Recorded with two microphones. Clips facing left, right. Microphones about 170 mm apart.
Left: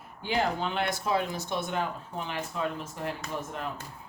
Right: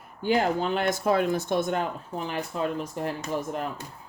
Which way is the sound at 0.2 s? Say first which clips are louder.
Right 5 dB; 45° right (ahead or behind).